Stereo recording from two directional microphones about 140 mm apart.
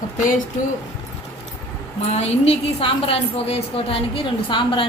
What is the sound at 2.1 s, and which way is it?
A woman's voice, 50° left (ahead or behind).